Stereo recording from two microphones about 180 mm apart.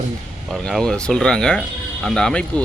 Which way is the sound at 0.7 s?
Centre (ahead or behind).